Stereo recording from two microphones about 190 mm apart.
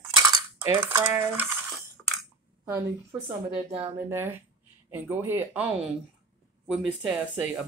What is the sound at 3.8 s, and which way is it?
Speech, 10° right (ahead or behind).